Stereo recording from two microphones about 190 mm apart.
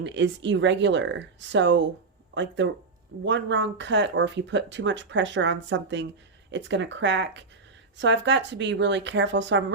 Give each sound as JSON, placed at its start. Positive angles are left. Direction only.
{"t": 0.0, "sound": "speech", "side_deg": -70}